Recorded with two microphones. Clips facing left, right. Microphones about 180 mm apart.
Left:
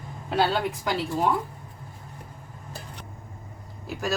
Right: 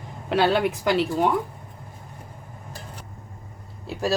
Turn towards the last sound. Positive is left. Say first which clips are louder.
# right 4 dB
turn(degrees=-30)  # may be behind; listen again after turning